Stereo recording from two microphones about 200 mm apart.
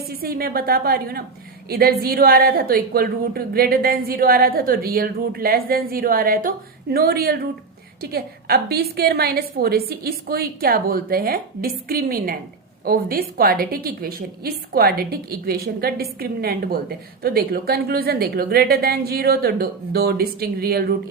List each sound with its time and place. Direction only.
0.2 s a woman's voice: 50° right (ahead or behind)